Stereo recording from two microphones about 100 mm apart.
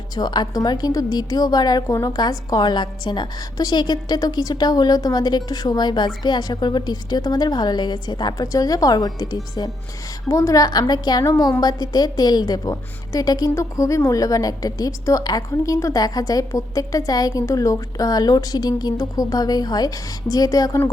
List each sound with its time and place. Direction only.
0.2 s a woman's voice: 45° left (ahead or behind)